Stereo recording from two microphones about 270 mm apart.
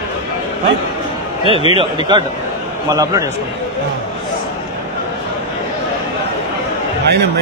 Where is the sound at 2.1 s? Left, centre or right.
Centre.